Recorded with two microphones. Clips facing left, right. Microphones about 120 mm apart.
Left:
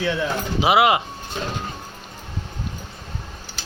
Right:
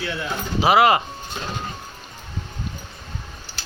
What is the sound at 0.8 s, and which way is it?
Speech, 15° left (ahead or behind).